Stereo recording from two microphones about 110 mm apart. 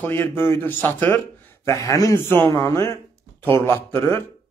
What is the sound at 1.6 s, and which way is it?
Speech, 30° left (ahead or behind).